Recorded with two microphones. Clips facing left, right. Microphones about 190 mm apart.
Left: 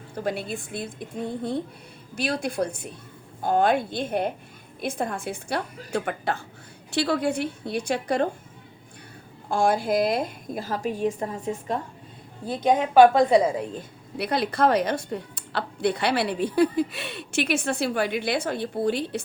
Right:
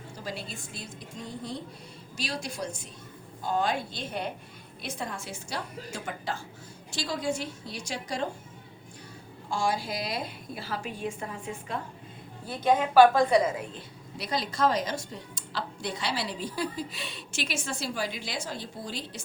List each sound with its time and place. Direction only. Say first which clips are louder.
0.2 s speech: left 10 dB; 55° left (ahead or behind)
9.5 s a woman's voice: left 8 dB; 55° left (ahead or behind); by 11.8 s 40° left (ahead or behind)
12.9 s a woman's voice: left 4 dB; 30° left (ahead or behind)
13.7 s speech: left 8 dB; 60° left (ahead or behind)